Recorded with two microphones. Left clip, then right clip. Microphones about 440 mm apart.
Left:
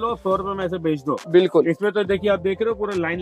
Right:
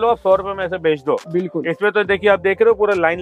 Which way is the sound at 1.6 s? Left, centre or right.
Right.